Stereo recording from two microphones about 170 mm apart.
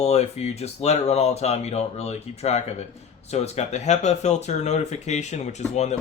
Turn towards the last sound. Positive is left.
turn(degrees=40)  # may be behind; listen again after turning